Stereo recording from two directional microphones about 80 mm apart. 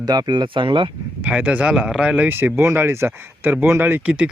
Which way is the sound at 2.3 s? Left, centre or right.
Right.